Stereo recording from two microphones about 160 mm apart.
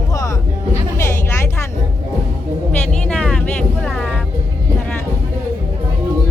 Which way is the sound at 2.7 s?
5° left (ahead or behind).